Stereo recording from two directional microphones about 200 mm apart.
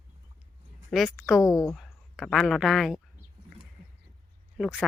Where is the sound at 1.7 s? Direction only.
Centre (ahead or behind).